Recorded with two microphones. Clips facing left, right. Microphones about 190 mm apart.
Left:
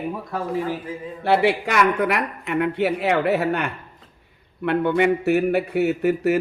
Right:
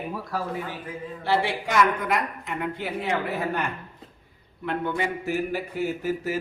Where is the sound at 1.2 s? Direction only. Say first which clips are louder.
Left 7 dB; 65° left (ahead or behind).